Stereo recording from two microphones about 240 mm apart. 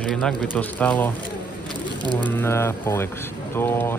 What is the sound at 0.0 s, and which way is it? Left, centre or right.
Speech, centre.